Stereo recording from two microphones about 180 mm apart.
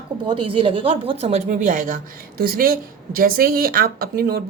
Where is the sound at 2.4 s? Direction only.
55° right (ahead or behind).